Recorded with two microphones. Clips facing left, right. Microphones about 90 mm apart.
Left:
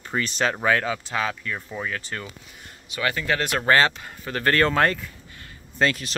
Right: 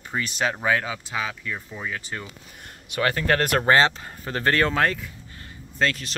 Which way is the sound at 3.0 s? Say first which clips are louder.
Right 3 dB; 40° right (ahead or behind).